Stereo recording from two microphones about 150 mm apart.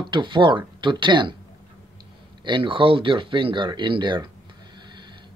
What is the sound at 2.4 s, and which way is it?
Speech, 35° right (ahead or behind).